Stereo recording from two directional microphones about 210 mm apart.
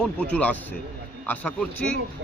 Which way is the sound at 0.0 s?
5° left (ahead or behind).